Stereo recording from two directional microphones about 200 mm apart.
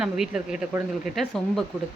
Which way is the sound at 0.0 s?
5° right (ahead or behind).